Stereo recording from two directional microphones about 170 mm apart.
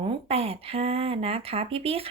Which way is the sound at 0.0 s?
35° right (ahead or behind).